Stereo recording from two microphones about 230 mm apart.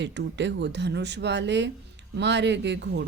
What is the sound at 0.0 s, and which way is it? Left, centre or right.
A woman's voice, right.